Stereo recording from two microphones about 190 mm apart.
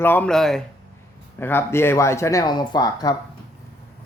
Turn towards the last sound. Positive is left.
turn(degrees=20)  # may be behind; listen again after turning